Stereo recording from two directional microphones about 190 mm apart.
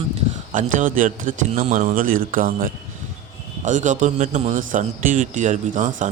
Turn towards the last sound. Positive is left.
turn(degrees=-40)  # may be behind; listen again after turning